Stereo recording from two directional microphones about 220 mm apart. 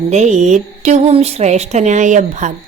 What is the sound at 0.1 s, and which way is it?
Speech, 30° right (ahead or behind).